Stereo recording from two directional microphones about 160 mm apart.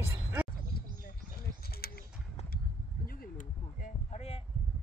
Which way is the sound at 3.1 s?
60° left (ahead or behind).